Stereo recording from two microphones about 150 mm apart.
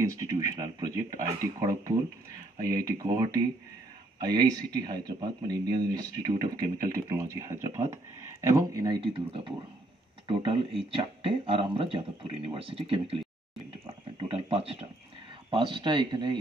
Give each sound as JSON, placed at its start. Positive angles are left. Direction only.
{"t": 0.0, "sound": "speech", "side_deg": -25}
{"t": 9.0, "sound": "speech", "side_deg": -35}
{"t": 13.8, "sound": "a sound", "side_deg": -40}
{"t": 15.5, "sound": "speech", "side_deg": -35}